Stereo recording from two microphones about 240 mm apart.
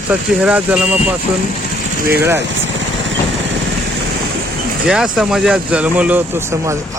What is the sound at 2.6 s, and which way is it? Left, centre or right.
Vehicle, right.